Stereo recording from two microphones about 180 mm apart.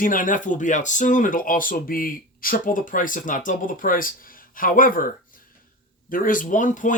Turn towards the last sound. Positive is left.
turn(degrees=45)  # may be behind; listen again after turning